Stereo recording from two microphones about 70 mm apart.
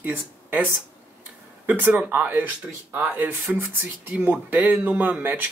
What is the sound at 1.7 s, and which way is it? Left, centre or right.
Speech, right.